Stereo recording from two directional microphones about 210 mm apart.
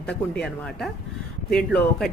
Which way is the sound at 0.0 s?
5° left (ahead or behind).